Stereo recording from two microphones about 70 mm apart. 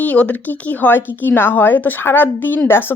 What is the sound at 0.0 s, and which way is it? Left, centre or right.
A woman's voice, left.